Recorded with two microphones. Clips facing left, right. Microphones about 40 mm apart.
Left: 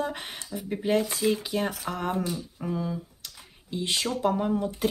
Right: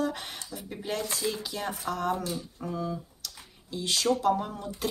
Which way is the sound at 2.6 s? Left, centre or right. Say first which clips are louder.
Left 3 dB; centre.